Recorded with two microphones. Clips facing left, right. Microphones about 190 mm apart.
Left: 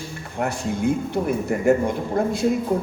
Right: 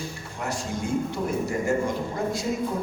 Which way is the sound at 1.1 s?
60° left (ahead or behind).